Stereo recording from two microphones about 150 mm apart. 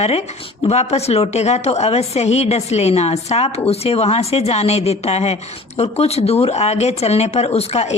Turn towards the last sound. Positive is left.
turn(degrees=45)  # may be behind; listen again after turning